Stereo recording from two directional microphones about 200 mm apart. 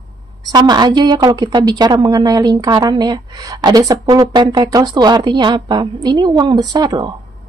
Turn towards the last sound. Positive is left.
turn(degrees=-20)  # may be behind; listen again after turning